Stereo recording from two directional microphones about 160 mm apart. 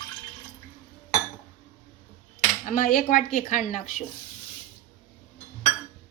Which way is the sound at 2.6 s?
55° left (ahead or behind).